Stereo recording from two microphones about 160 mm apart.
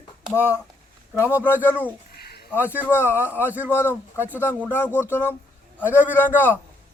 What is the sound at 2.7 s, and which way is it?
Speech, 15° left (ahead or behind).